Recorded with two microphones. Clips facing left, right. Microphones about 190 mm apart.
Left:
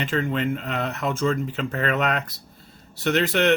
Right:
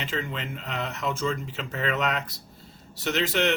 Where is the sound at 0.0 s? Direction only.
55° left (ahead or behind).